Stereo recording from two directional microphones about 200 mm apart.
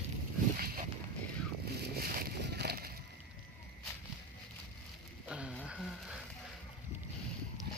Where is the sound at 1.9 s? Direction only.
50° right (ahead or behind).